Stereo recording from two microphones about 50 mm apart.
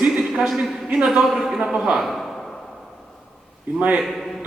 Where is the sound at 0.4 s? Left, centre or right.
Centre.